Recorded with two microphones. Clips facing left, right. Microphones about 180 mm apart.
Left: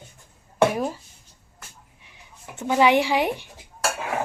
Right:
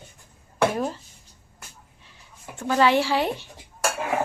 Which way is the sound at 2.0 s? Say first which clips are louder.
Left 1 dB; 15° left (ahead or behind).